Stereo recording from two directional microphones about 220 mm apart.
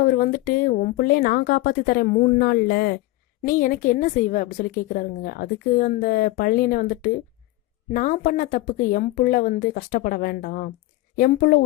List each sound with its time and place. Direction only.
0.0 s a woman's voice: 40° left (ahead or behind)